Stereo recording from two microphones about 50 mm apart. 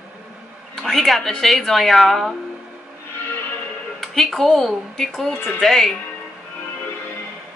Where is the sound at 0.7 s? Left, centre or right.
Centre.